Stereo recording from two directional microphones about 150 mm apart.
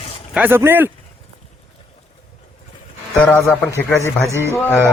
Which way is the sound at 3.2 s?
10° left (ahead or behind).